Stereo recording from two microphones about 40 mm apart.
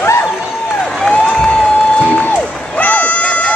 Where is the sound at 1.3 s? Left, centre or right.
Centre.